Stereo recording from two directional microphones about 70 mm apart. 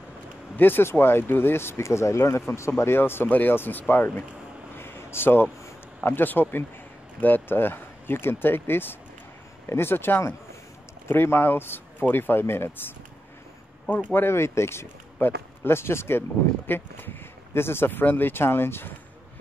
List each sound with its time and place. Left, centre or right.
0.6 s speech: left
4.7 s a sound: left
6.0 s speech: left
14.1 s speech: left